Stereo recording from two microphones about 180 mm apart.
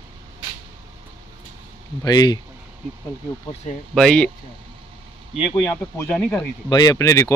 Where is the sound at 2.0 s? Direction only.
20° left (ahead or behind).